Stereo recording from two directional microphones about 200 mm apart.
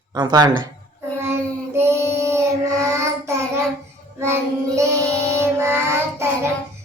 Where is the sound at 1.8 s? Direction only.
15° right (ahead or behind).